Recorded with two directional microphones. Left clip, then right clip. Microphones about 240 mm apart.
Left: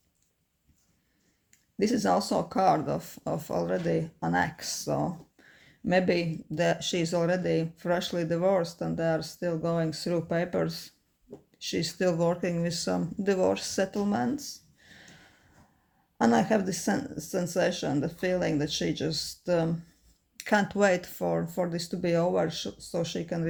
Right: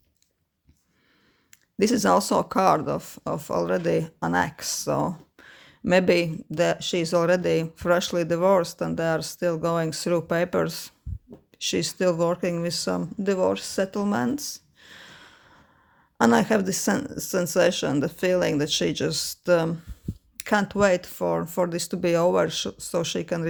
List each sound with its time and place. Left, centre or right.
1.5 s speech: right